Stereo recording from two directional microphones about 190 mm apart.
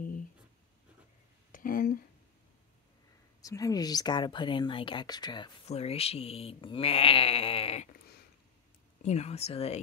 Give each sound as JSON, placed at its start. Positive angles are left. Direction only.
{"t": 1.5, "sound": "a sound", "side_deg": 45}
{"t": 3.4, "sound": "speech", "side_deg": 20}
{"t": 9.0, "sound": "speech", "side_deg": 35}